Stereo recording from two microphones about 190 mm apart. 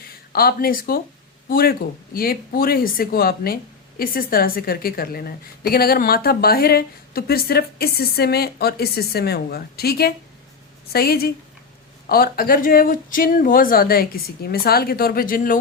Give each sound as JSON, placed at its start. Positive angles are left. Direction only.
{"t": 0.3, "sound": "speech", "side_deg": 50}